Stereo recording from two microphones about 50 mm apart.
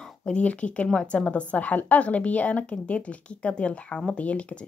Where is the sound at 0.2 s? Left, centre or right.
Left.